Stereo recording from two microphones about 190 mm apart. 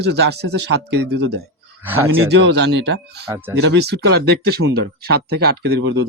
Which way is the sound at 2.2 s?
60° right (ahead or behind).